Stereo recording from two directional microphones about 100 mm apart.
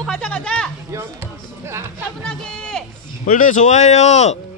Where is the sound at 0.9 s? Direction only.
25° right (ahead or behind).